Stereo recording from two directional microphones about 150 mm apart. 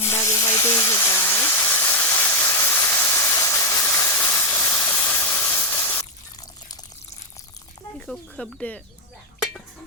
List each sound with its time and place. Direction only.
0.0 s steam: 20° left (ahead or behind)
7.9 s speech: 5° left (ahead or behind)